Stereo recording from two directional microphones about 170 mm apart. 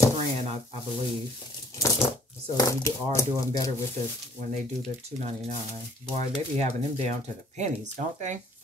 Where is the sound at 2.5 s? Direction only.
15° left (ahead or behind).